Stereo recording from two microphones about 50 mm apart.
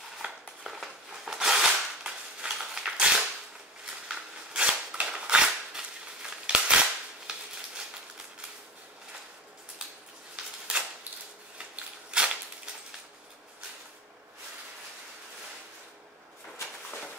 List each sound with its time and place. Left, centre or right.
0.2 s a sound: right
0.7 s cap gun: centre; by 6.8 s right
11.5 s scissors: right